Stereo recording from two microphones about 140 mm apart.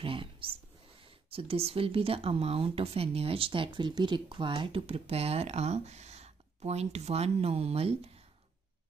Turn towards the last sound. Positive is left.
turn(degrees=-45)  # may be behind; listen again after turning